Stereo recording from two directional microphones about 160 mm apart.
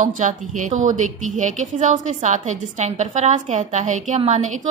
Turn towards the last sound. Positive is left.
turn(degrees=-45)  # may be behind; listen again after turning